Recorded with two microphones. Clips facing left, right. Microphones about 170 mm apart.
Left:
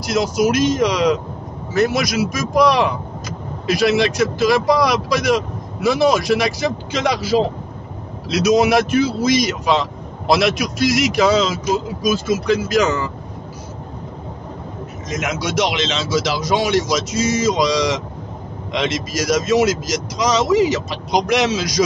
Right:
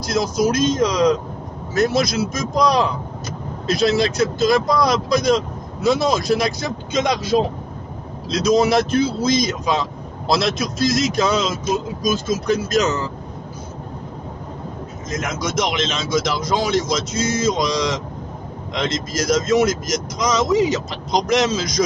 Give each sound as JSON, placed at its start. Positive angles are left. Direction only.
{"t": 0.0, "sound": "speech", "side_deg": 75}
{"t": 2.3, "sound": "vehicle", "side_deg": 75}
{"t": 3.8, "sound": "speech", "side_deg": 75}
{"t": 9.0, "sound": "speech", "side_deg": 80}
{"t": 15.0, "sound": "speech", "side_deg": 75}